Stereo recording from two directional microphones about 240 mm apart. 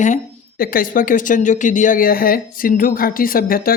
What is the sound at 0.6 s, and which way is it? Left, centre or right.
Speech, left.